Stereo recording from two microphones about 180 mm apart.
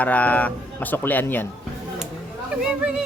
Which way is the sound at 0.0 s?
10° left (ahead or behind).